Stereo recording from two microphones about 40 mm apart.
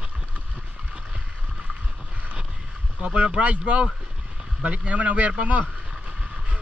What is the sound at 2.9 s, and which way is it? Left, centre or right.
Speech, right.